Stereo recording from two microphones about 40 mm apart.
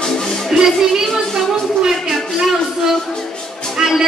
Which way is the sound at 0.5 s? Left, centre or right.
Centre.